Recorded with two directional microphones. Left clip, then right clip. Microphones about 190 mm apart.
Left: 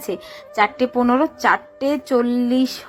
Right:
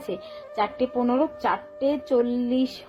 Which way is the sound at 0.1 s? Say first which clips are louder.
Left 7 dB; 15° left (ahead or behind).